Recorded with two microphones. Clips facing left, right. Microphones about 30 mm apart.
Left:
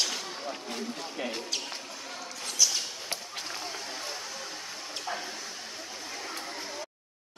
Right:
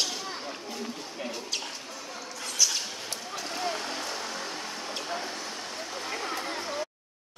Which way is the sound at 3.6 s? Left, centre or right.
Right.